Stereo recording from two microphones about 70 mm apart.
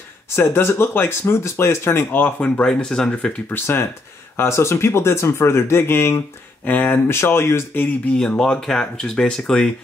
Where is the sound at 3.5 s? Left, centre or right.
Left.